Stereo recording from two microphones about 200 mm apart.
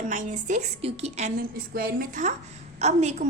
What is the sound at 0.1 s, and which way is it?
A woman's voice, 35° right (ahead or behind).